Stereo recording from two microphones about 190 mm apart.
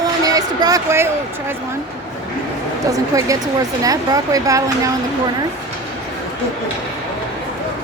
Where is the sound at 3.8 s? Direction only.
20° right (ahead or behind).